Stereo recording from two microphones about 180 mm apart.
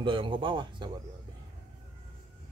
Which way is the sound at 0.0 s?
30° right (ahead or behind).